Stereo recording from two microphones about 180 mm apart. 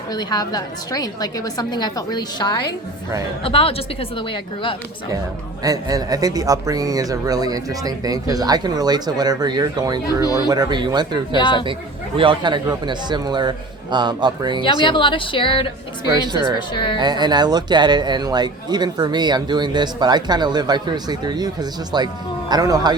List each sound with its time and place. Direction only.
0.1 s a woman's voice: 20° left (ahead or behind)
5.6 s speech: 20° right (ahead or behind)
11.3 s a woman's voice: 25° left (ahead or behind)
12.1 s speech: 30° right (ahead or behind)
14.6 s a woman's voice: 25° left (ahead or behind)
17.0 s speech: 25° right (ahead or behind)